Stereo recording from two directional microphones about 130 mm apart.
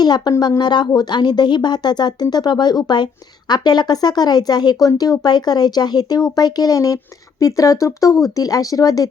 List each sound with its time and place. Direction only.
0.0 s a woman's voice: 30° left (ahead or behind)